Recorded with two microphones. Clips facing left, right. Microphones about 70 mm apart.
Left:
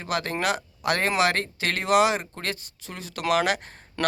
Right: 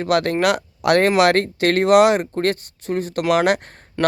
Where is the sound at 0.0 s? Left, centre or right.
Right.